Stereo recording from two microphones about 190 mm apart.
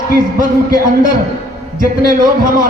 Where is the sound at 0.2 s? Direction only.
45° right (ahead or behind).